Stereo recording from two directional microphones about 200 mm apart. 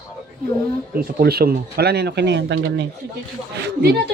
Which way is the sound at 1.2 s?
50° right (ahead or behind).